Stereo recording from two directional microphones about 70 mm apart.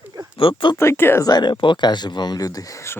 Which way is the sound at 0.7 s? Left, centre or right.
Left.